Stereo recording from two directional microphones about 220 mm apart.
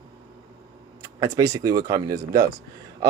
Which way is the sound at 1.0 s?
15° right (ahead or behind).